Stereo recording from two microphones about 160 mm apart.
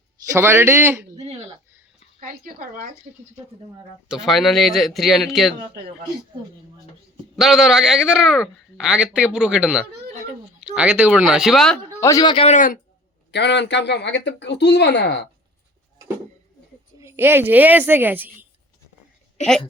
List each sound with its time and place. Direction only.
0.3 s a woman's voice: 15° right (ahead or behind)
1.1 s a sound: 40° right (ahead or behind)
2.2 s speech: 60° right (ahead or behind)
4.1 s speech: centre (ahead or behind)
7.3 s speech: centre (ahead or behind)
11.9 s a man's voice: 20° left (ahead or behind)
12.5 s speech: 55° left (ahead or behind)
13.3 s speech: 90° left
17.0 s a woman's voice: 15° right (ahead or behind)